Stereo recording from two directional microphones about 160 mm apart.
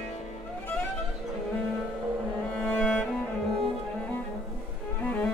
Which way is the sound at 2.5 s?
5° left (ahead or behind).